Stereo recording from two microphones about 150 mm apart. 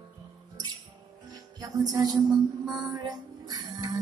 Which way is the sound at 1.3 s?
25° right (ahead or behind).